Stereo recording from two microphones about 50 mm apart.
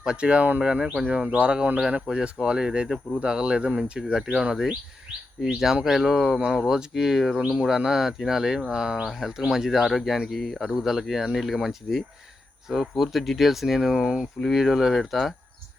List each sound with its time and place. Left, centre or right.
0.0 s speech: centre
4.0 s speech: centre
5.8 s speech: centre